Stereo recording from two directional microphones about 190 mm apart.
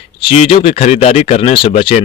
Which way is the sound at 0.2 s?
30° left (ahead or behind).